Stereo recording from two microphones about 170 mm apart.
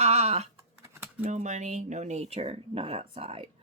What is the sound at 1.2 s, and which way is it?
A woman's voice, 50° right (ahead or behind).